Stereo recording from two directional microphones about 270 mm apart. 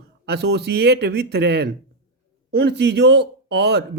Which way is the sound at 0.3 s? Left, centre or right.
Right.